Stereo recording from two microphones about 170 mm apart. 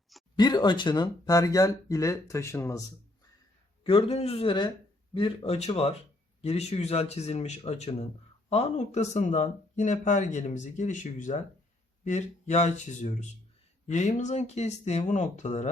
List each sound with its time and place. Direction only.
0.3 s speech: 25° left (ahead or behind)
3.8 s speech: 35° left (ahead or behind)